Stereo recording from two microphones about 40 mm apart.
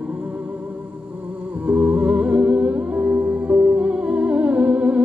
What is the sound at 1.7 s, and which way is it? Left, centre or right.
Music, right.